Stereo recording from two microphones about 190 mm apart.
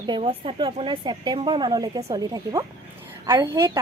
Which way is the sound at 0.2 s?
30° right (ahead or behind).